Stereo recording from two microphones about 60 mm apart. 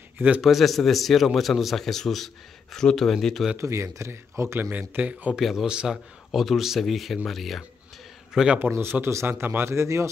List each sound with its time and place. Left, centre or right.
0.4 s speech: centre
3.5 s a man's voice: right
4.6 s speech: right
5.4 s speech: centre
8.3 s a man's voice: centre
8.5 s a man's voice: right